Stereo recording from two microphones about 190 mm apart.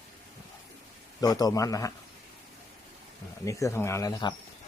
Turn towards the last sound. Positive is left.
turn(degrees=15)  # may be behind; listen again after turning